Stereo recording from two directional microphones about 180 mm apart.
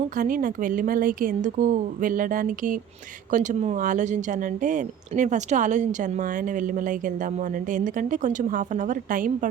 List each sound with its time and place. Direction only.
0.2 s speech: 50° right (ahead or behind)